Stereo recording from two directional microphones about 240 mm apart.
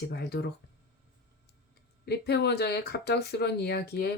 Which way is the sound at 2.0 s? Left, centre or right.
Left.